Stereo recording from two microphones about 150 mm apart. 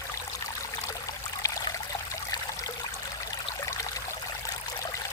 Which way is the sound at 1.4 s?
20° left (ahead or behind).